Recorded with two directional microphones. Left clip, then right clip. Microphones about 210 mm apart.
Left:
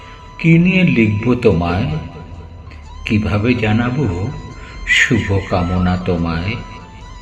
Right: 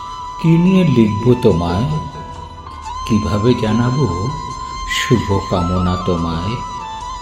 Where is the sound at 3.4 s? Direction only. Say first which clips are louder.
Right 2 dB; 50° right (ahead or behind).